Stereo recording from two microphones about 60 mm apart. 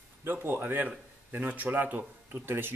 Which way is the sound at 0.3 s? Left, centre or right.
Right.